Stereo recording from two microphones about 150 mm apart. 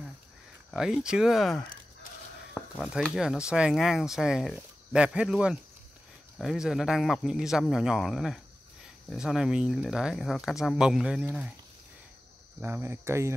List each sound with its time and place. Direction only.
0.7 s speech: centre (ahead or behind)
12.6 s speech: 15° right (ahead or behind)